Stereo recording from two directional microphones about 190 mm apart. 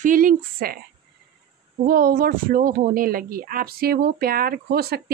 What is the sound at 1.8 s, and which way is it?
A woman's voice, 50° right (ahead or behind).